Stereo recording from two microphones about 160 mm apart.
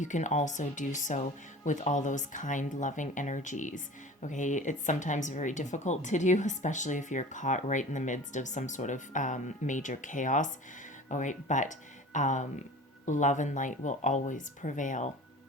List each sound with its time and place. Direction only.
0.0 s speech: 50° left (ahead or behind)